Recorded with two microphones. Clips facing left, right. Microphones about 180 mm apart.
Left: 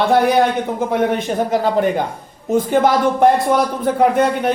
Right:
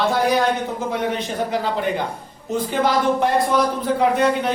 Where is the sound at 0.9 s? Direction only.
50° left (ahead or behind).